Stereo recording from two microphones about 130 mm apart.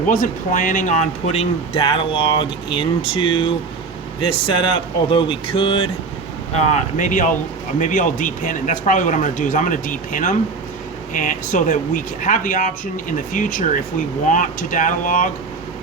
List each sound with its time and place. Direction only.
0.1 s speech: 85° left; by 5.9 s 45° left (ahead or behind)
6.5 s speech: 60° left (ahead or behind); by 15.3 s 85° left